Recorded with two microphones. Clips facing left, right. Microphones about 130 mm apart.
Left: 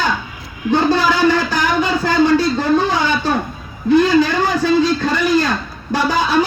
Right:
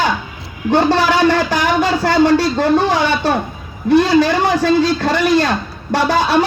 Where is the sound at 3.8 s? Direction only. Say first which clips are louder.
Right 1 dB; 70° right (ahead or behind).